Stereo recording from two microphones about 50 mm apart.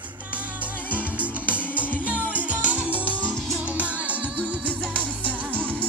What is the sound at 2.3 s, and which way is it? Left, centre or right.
Music, right.